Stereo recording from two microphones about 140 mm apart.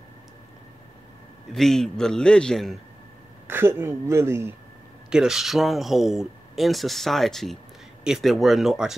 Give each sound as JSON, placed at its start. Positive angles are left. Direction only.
{"t": 1.5, "sound": "speech", "side_deg": 5}
{"t": 3.4, "sound": "speech", "side_deg": -15}
{"t": 5.1, "sound": "speech", "side_deg": -5}